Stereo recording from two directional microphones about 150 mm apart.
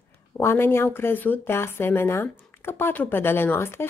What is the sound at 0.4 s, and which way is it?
Speech, 15° left (ahead or behind).